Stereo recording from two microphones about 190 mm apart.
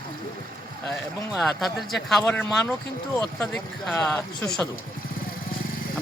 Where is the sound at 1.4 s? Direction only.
Centre (ahead or behind).